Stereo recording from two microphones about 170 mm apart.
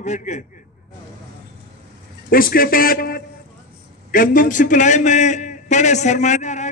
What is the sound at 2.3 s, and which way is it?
A man's voice, 60° left (ahead or behind).